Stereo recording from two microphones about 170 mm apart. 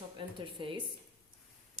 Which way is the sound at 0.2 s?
30° right (ahead or behind).